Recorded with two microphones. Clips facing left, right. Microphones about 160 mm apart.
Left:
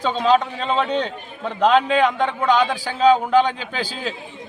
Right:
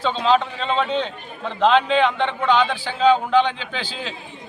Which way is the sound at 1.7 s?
10° left (ahead or behind).